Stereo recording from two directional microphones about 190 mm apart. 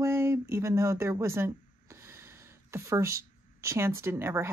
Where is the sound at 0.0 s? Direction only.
15° right (ahead or behind).